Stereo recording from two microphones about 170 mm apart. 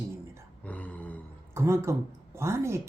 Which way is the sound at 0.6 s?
10° left (ahead or behind).